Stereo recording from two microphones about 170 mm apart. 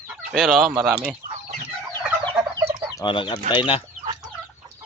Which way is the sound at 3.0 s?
30° left (ahead or behind).